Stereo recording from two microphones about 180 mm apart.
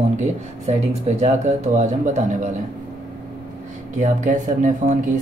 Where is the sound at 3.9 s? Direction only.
45° right (ahead or behind).